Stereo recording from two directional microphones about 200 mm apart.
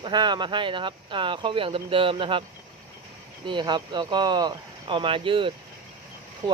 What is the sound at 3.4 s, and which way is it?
Speech, 25° right (ahead or behind).